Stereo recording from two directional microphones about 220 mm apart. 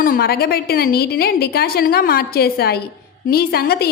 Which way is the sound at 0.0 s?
40° left (ahead or behind).